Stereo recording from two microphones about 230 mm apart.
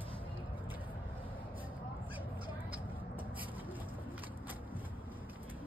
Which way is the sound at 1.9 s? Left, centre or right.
Centre.